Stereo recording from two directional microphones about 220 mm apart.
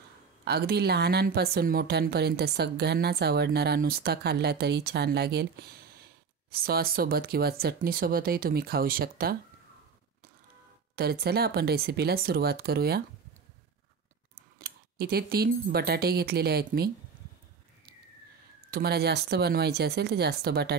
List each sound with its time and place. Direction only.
0.5 s speech: 45° right (ahead or behind)
11.0 s speech: 45° right (ahead or behind)
14.6 s speech: 45° right (ahead or behind)
18.7 s speech: 45° right (ahead or behind)